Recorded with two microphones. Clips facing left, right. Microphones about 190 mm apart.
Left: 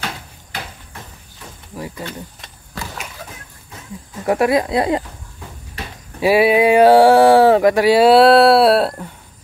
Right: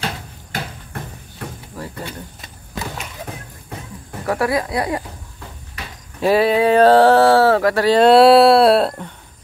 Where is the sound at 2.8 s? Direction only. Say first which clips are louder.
Right 3 dB; 20° right (ahead or behind).